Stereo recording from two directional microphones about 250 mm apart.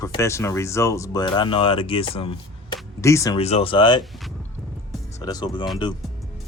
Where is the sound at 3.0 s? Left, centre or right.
Centre.